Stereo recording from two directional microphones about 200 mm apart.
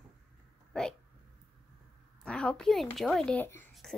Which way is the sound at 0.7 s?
5° left (ahead or behind).